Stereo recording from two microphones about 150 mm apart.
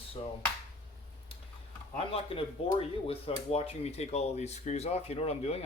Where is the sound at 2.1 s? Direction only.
40° left (ahead or behind).